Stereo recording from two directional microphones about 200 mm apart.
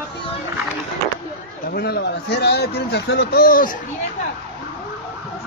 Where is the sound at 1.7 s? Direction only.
55° left (ahead or behind).